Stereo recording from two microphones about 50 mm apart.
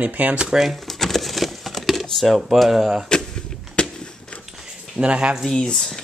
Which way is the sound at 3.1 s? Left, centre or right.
Centre.